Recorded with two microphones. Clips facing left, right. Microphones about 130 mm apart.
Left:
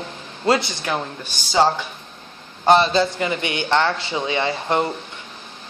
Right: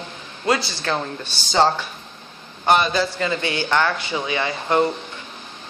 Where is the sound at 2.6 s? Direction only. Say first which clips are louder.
Left 3 dB; 30° left (ahead or behind).